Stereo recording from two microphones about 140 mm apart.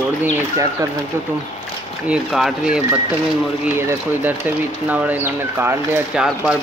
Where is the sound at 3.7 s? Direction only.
15° right (ahead or behind).